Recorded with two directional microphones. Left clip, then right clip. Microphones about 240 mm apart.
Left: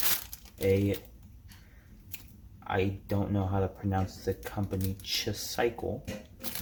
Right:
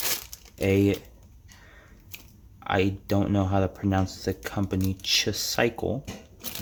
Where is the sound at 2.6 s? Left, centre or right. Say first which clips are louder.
Right 6 dB; right.